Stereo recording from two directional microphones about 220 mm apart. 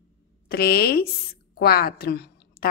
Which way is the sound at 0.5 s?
45° left (ahead or behind).